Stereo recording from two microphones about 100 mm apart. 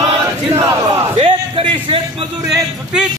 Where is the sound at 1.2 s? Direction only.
65° right (ahead or behind).